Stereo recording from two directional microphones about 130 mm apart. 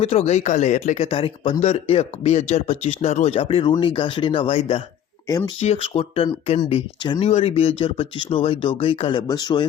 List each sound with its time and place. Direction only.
0.0 s speech: 55° left (ahead or behind)
7.0 s speech: 35° left (ahead or behind)
7.3 s speech: 55° left (ahead or behind); by 9.6 s 30° left (ahead or behind)